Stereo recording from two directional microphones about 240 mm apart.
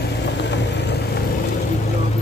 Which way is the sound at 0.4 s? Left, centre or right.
Left.